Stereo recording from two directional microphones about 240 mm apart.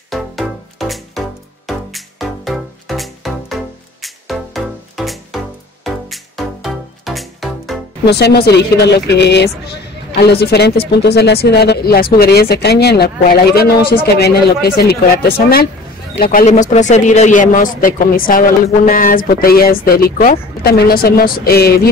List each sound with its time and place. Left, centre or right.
0.1 s music: centre
8.0 s speech: left